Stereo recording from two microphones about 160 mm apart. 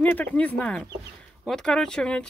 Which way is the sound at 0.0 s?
10° left (ahead or behind).